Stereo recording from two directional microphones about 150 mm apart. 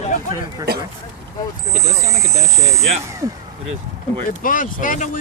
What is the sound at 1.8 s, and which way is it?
Speech, 45° right (ahead or behind).